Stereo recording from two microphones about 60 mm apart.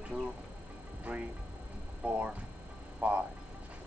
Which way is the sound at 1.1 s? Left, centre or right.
Right.